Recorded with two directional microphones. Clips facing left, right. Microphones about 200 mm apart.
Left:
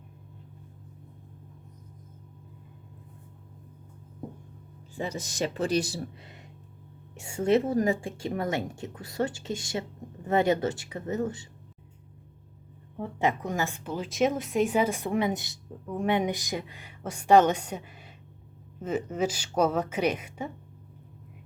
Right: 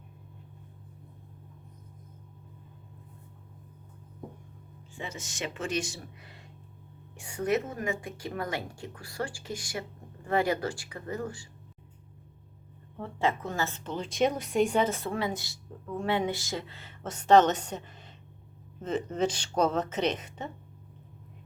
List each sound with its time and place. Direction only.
4.9 s speech: 35° left (ahead or behind)
6.2 s a sound: 20° left (ahead or behind)
7.1 s speech: 25° left (ahead or behind)
13.0 s speech: 15° left (ahead or behind)